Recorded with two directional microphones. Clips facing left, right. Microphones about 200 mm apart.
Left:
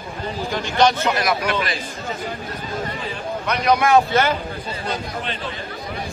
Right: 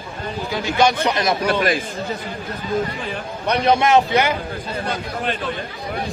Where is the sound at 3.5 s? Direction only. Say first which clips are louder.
Right 1 dB; 30° right (ahead or behind).